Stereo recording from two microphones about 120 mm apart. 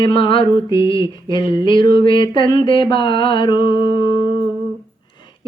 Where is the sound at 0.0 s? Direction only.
45° left (ahead or behind).